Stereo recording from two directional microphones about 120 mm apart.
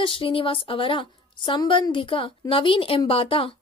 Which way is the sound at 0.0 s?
45° left (ahead or behind).